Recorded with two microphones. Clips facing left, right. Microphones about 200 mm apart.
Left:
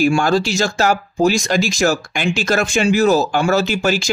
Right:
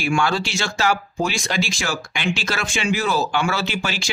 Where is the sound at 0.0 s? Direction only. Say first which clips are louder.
Left 6 dB; 40° left (ahead or behind).